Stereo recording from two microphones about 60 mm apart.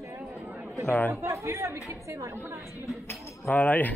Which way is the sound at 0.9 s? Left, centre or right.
Left.